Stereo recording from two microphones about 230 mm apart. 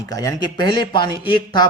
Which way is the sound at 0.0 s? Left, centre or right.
Centre.